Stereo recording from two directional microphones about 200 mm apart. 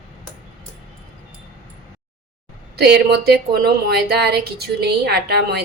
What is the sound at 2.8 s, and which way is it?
Speech, 55° right (ahead or behind).